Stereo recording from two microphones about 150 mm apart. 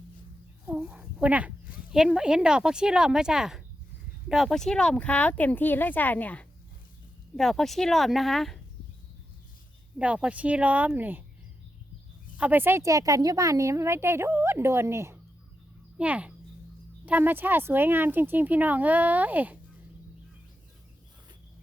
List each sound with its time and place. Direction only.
0.7 s speech: 10° right (ahead or behind)
10.0 s a woman's voice: 10° right (ahead or behind)
12.4 s a woman's voice: 10° right (ahead or behind)